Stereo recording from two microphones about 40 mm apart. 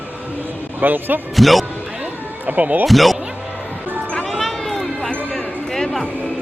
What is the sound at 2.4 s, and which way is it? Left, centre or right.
Speech, right.